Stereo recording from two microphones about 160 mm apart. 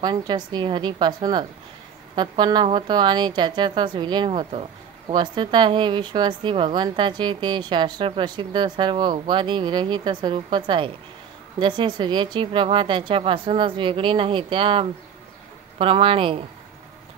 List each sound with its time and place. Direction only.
0.0 s a woman's voice: 25° right (ahead or behind)